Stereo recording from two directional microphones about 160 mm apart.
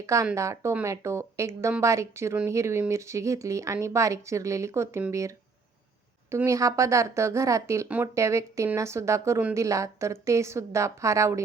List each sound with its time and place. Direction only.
0.0 s speech: 20° right (ahead or behind)
6.3 s speech: 20° right (ahead or behind)